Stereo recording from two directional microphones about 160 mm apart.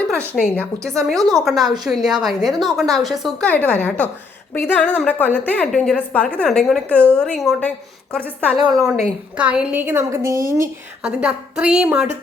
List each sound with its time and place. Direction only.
0.1 s a woman's voice: 5° left (ahead or behind)
3.5 s a woman's voice: 10° left (ahead or behind)
8.5 s a woman's voice: 5° right (ahead or behind)
11.0 s a woman's voice: 5° right (ahead or behind)